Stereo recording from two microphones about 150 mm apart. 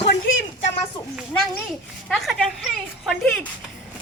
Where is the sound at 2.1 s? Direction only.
Centre (ahead or behind).